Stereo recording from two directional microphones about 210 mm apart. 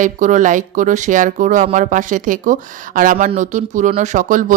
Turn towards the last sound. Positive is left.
turn(degrees=-40)  # may be behind; listen again after turning